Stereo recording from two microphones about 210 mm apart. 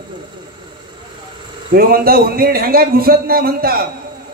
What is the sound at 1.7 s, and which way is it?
A man's voice, 45° right (ahead or behind).